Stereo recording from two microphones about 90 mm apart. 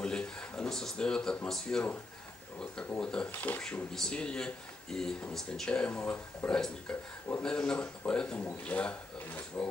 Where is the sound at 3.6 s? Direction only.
10° left (ahead or behind).